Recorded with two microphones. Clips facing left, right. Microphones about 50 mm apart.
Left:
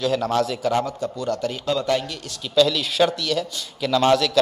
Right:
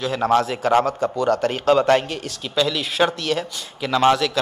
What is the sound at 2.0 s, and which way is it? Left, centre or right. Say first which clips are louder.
A man's voice: right 4 dB; right.